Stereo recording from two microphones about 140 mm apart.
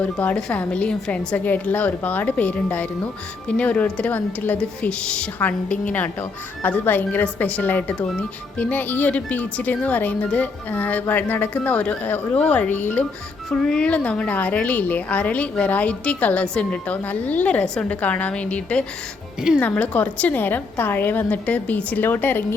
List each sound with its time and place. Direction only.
0.0 s a woman's voice: 10° left (ahead or behind)